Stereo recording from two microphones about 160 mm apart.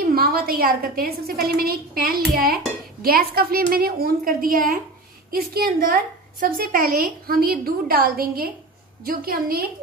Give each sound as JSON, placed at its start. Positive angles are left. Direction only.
{"t": 0.1, "sound": "a woman's voice", "side_deg": -70}